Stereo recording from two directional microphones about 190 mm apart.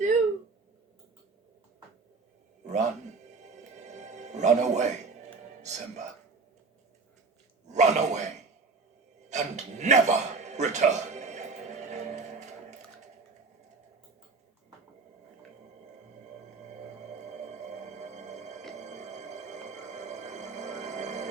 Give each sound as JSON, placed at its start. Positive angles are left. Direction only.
{"t": 2.6, "sound": "a man's voice", "side_deg": -35}
{"t": 3.4, "sound": "music", "side_deg": -40}
{"t": 5.6, "sound": "a man's voice", "side_deg": -35}
{"t": 7.7, "sound": "a man's voice", "side_deg": -40}
{"t": 9.3, "sound": "a sound", "side_deg": -40}
{"t": 17.3, "sound": "music", "side_deg": -40}